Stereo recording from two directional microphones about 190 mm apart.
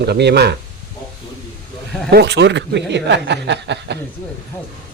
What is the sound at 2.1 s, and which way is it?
Speech, 65° right (ahead or behind).